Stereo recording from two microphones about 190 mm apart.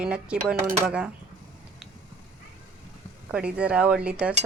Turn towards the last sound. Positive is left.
turn(degrees=-5)  # may be behind; listen again after turning